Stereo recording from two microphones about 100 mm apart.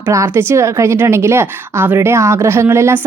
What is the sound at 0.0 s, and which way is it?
A woman's voice, 25° right (ahead or behind).